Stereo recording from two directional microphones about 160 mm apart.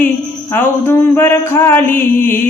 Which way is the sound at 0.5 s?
15° left (ahead or behind).